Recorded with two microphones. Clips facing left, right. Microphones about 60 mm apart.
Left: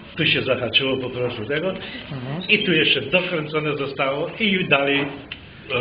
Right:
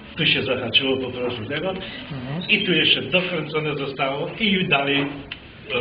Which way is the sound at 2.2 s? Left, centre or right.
Centre.